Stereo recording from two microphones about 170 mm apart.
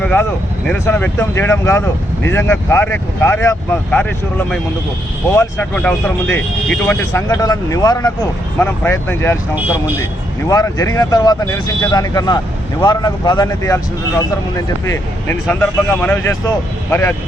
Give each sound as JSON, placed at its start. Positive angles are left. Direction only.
{"t": 0.0, "sound": "speech", "side_deg": 5}
{"t": 7.1, "sound": "speech", "side_deg": 20}
{"t": 8.5, "sound": "speech", "side_deg": 10}
{"t": 9.6, "sound": "speech", "side_deg": -10}
{"t": 10.5, "sound": "speech", "side_deg": 20}
{"t": 14.8, "sound": "speech", "side_deg": 15}